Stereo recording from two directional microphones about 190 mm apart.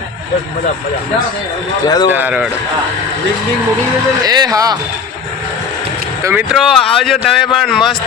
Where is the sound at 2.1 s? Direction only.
10° right (ahead or behind).